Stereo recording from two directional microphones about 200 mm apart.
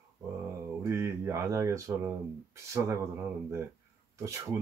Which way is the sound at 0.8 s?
15° right (ahead or behind).